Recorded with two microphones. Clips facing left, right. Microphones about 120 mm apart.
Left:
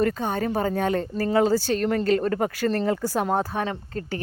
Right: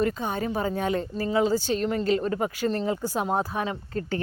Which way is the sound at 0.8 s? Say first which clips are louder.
Left 3 dB; 40° left (ahead or behind).